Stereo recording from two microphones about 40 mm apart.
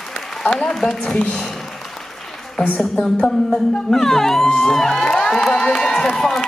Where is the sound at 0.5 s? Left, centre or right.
Centre.